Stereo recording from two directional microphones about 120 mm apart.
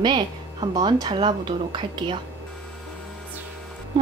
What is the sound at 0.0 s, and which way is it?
A woman's voice, 40° right (ahead or behind).